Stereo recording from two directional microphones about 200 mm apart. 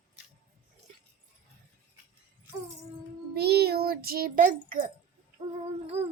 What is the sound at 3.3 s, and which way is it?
A child's voice, 55° right (ahead or behind).